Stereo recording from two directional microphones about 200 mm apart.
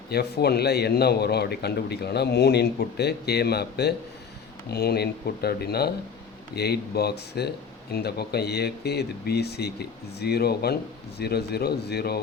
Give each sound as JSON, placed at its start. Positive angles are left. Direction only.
{"t": 0.1, "sound": "a man's voice", "side_deg": 55}